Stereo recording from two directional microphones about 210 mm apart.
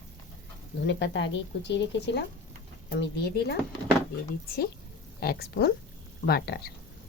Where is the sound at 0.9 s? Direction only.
55° left (ahead or behind).